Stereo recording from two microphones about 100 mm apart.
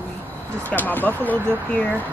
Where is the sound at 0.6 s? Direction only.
20° left (ahead or behind).